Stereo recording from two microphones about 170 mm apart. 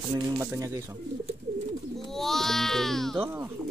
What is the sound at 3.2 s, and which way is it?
Speech, 15° right (ahead or behind).